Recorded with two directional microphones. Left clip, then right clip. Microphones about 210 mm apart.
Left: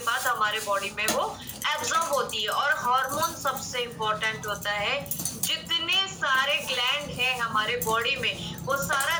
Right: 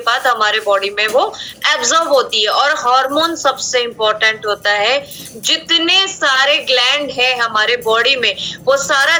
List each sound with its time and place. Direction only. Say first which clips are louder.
0.0 s a woman's voice: right 12 dB; 50° right (ahead or behind)